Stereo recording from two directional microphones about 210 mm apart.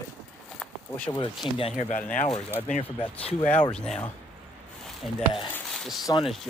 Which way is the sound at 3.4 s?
5° left (ahead or behind).